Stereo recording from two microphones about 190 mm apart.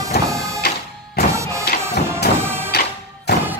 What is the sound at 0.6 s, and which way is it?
Music, 60° left (ahead or behind).